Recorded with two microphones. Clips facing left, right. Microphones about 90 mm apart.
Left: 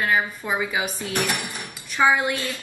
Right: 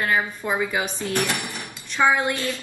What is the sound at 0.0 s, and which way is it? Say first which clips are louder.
Speech: even; 5° left (ahead or behind).